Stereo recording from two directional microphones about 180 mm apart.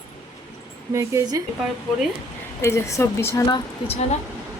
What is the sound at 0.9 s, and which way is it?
Speech, 15° right (ahead or behind).